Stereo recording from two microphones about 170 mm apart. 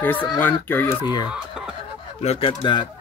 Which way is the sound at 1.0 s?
25° left (ahead or behind).